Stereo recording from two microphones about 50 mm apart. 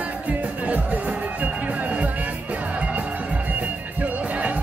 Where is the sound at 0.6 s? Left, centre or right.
Right.